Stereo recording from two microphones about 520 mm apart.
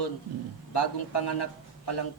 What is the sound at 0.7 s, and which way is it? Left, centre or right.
A man's voice, left.